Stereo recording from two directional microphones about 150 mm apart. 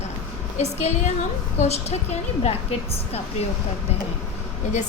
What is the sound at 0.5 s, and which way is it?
A woman's voice, 50° left (ahead or behind).